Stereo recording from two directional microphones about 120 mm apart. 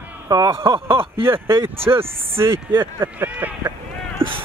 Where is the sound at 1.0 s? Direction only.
50° right (ahead or behind).